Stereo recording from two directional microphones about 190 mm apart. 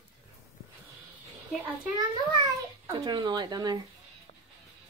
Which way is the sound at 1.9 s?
20° right (ahead or behind).